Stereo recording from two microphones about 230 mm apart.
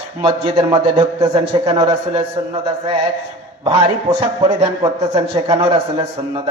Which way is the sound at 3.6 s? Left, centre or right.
Right.